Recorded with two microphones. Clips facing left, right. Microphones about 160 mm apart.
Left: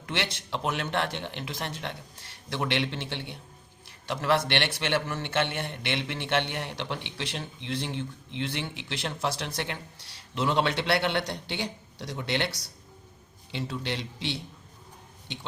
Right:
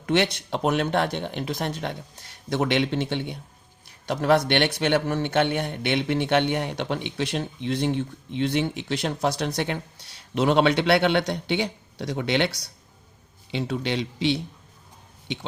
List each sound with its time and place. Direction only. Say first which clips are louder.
0.0 s a man's voice: right 10 dB; 55° right (ahead or behind)
13.5 s a man's voice: right 6 dB; 65° right (ahead or behind)